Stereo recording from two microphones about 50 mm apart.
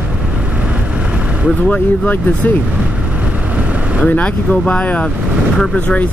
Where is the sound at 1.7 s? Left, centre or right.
Left.